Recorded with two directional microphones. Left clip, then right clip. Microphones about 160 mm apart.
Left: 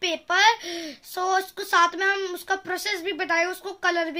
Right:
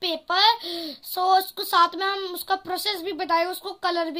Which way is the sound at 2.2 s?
10° left (ahead or behind).